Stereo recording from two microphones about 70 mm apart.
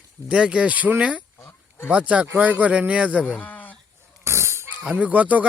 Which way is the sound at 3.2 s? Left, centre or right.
Left.